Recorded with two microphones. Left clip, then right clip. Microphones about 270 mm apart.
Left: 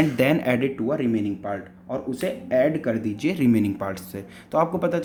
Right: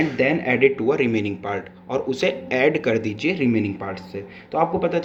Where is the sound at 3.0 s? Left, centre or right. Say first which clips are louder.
Right 3 dB; left.